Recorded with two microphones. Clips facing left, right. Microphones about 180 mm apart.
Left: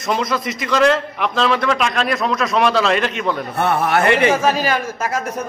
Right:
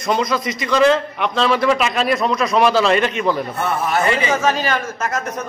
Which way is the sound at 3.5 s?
60° left (ahead or behind).